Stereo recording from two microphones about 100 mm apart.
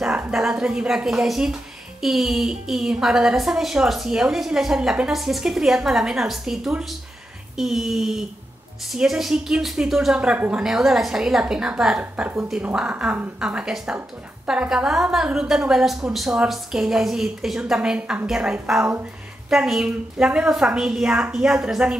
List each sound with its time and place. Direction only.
0.3 s a woman's voice: 5° right (ahead or behind)
12.0 s a woman's voice: 15° right (ahead or behind)